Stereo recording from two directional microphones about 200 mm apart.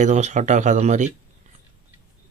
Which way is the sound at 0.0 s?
35° right (ahead or behind).